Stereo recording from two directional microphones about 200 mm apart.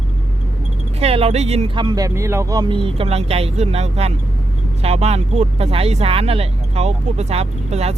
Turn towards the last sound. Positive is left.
turn(degrees=-30)  # may be behind; listen again after turning